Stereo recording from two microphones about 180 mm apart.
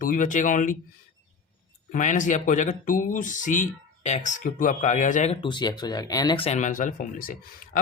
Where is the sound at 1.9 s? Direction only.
45° left (ahead or behind); by 6.5 s 25° left (ahead or behind).